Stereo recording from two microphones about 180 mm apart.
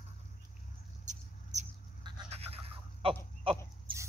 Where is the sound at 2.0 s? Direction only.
35° right (ahead or behind).